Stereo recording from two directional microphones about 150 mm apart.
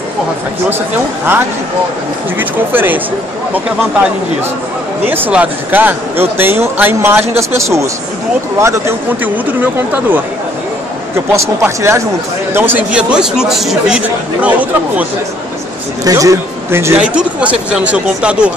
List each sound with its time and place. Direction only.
0.7 s speech: 15° right (ahead or behind)
5.0 s speech: 15° right (ahead or behind)
11.3 s speech: 20° right (ahead or behind)
16.0 s speech: 25° right (ahead or behind); by 18.5 s 5° right (ahead or behind)